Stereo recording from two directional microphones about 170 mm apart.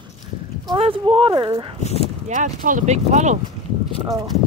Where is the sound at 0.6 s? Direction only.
30° right (ahead or behind).